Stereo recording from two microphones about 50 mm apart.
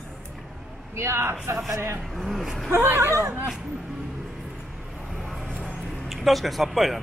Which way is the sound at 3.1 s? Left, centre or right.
Right.